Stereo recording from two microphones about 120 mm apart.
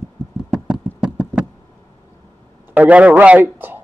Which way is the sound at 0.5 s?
5° right (ahead or behind).